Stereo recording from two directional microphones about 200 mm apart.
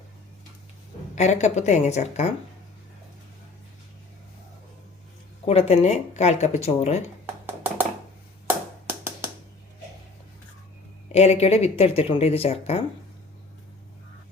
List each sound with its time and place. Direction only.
1.1 s speech: 35° left (ahead or behind)
5.5 s speech: 30° left (ahead or behind)
7.4 s a sound: 10° right (ahead or behind)
11.1 s speech: 30° left (ahead or behind)